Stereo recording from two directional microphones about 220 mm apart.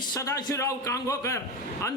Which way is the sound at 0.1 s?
15° left (ahead or behind).